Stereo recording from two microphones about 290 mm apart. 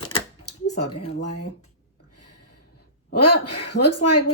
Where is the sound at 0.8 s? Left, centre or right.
Left.